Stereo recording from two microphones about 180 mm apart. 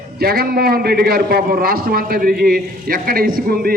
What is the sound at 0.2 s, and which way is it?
A man's voice, 60° right (ahead or behind).